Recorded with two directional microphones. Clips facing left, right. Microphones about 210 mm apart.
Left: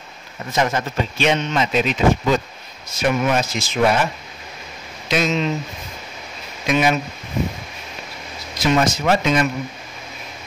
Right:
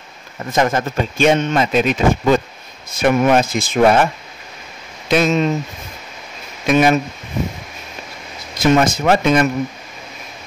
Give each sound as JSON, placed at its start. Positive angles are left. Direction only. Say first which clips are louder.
{"t": 0.5, "sound": "speech", "louder": "right 4 dB", "side_deg": -50}
{"t": 6.7, "sound": "speech", "louder": "right 5 dB", "side_deg": -50}
{"t": 8.5, "sound": "speech", "louder": "right 4 dB", "side_deg": -50}